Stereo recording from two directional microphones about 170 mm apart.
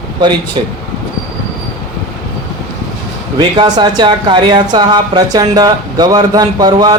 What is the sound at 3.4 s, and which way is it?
Speech, 25° right (ahead or behind).